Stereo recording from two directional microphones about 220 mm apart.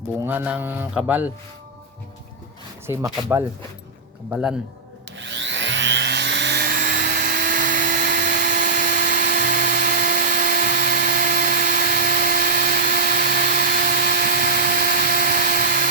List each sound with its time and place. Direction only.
0.2 s music: 10° right (ahead or behind)
2.8 s music: 10° right (ahead or behind)
4.3 s a man's voice: 5° right (ahead or behind)
5.1 s vacuum cleaner: 55° right (ahead or behind); by 8.4 s 35° right (ahead or behind)
8.4 s a sound: 45° right (ahead or behind)